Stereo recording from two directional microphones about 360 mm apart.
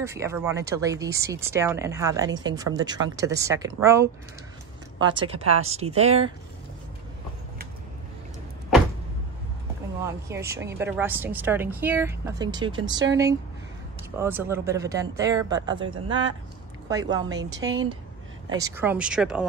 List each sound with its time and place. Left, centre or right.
0.0 s speech: centre
10.2 s speech: centre
12.9 s speech: right
14.1 s speech: centre
16.9 s speech: centre